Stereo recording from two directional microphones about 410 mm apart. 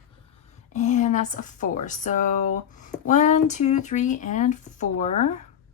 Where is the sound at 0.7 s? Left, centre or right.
Centre.